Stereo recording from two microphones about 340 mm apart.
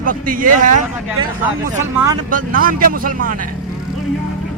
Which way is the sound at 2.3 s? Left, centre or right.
Right.